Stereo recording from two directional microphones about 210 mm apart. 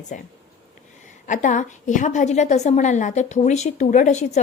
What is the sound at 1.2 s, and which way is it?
A woman's voice, 35° left (ahead or behind).